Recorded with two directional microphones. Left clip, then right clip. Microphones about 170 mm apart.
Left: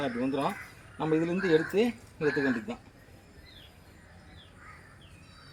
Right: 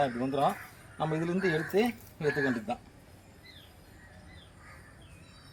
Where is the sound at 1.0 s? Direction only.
30° right (ahead or behind).